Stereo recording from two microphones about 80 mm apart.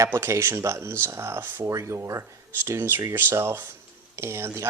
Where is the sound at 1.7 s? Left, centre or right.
Right.